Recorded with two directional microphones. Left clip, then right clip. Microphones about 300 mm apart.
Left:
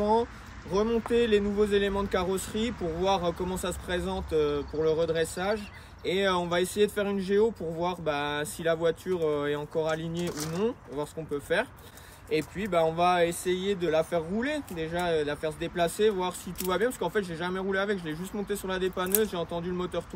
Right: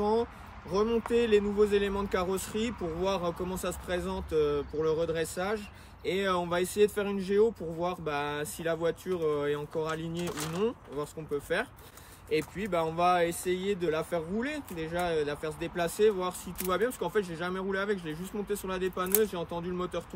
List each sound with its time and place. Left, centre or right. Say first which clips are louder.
0.7 s speech: left 1 dB; centre